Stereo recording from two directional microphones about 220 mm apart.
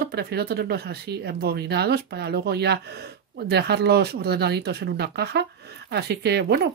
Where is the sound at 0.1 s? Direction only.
45° right (ahead or behind).